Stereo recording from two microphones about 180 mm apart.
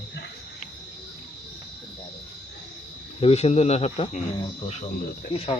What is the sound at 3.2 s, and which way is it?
Speech, 35° left (ahead or behind).